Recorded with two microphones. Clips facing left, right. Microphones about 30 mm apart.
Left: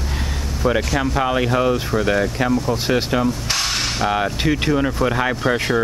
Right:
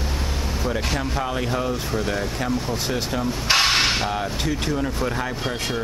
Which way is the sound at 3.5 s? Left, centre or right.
Right.